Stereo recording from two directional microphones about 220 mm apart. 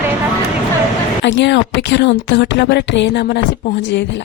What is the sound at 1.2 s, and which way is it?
A woman's voice, 50° left (ahead or behind).